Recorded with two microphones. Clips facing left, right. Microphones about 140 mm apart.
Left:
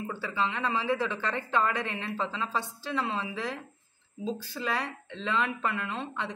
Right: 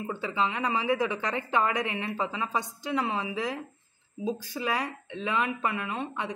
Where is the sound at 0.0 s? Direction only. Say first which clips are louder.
Right 2 dB; 20° right (ahead or behind).